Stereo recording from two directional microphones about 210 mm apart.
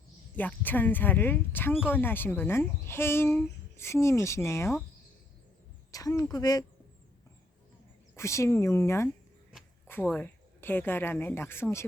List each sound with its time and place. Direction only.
0.3 s a woman's voice: 10° left (ahead or behind)
5.9 s a woman's voice: 15° left (ahead or behind)
8.1 s a woman's voice: 15° left (ahead or behind)